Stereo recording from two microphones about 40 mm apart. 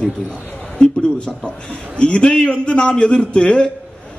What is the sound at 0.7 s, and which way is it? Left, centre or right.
A man's voice, left.